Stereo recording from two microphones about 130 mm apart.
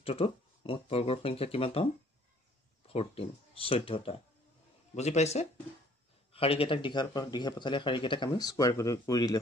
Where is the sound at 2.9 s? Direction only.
45° left (ahead or behind).